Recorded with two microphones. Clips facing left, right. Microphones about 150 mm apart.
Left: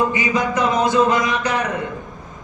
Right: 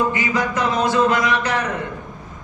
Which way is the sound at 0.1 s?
15° left (ahead or behind).